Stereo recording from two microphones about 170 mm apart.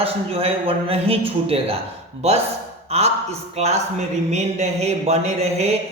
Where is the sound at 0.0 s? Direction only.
35° right (ahead or behind).